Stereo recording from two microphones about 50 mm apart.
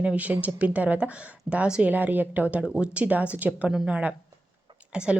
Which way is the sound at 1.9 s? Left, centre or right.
Right.